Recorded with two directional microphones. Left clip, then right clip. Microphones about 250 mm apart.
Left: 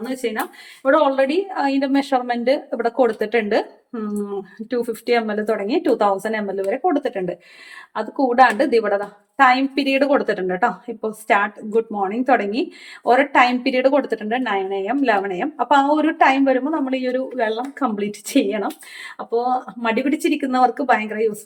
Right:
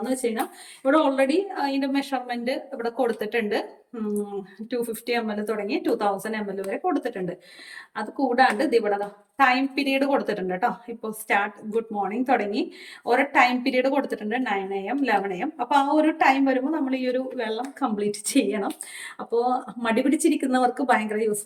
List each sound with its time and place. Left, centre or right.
0.0 s speech: centre
4.7 s speech: centre